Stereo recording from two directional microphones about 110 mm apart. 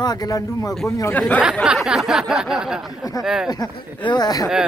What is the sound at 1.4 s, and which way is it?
Speech, 10° right (ahead or behind).